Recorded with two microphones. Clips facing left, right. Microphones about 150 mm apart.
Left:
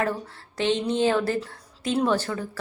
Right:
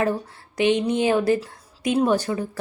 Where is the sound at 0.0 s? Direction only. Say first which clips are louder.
Right 4 dB; 15° right (ahead or behind).